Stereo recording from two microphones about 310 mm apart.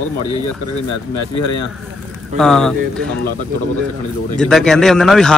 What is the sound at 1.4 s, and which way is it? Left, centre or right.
Speech, left.